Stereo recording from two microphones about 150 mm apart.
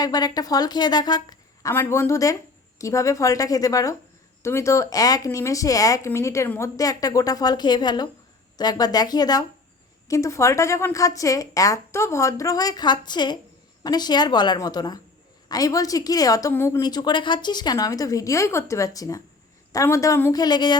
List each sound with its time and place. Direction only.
0.0 s a woman's voice: 25° left (ahead or behind)
1.7 s a woman's voice: 15° left (ahead or behind)
20.4 s a woman's voice: 30° left (ahead or behind)